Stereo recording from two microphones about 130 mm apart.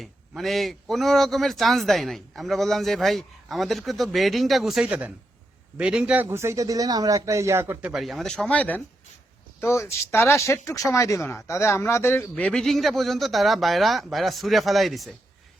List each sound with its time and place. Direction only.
0.0 s a man's voice: centre (ahead or behind)
6.2 s a man's voice: 20° right (ahead or behind); by 15.1 s centre (ahead or behind)